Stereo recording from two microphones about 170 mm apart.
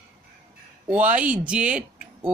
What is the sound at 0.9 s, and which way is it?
Speech, 10° right (ahead or behind).